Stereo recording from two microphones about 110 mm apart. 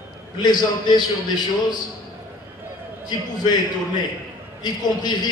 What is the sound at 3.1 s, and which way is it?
A man's voice, 40° left (ahead or behind).